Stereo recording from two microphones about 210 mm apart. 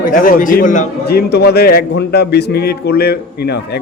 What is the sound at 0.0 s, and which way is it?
Speech, 40° left (ahead or behind).